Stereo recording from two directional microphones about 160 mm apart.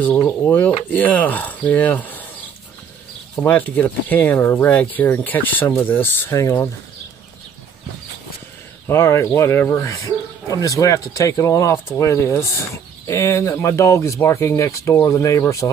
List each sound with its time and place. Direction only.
0.0 s speech: 10° left (ahead or behind)
3.3 s speech: 10° left (ahead or behind)
8.8 s speech: 15° left (ahead or behind)